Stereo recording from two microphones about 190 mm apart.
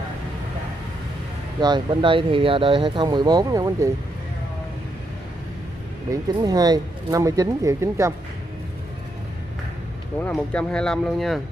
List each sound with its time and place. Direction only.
1.6 s speech: 25° right (ahead or behind)
6.0 s speech: 20° right (ahead or behind)
10.2 s speech: 5° left (ahead or behind)